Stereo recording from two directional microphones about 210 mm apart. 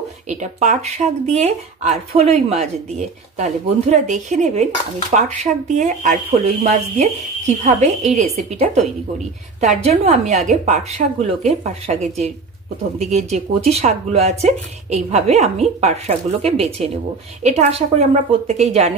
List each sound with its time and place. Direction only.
0.3 s a woman's voice: 35° right (ahead or behind)